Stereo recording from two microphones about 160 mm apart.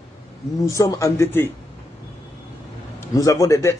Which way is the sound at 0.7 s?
20° left (ahead or behind).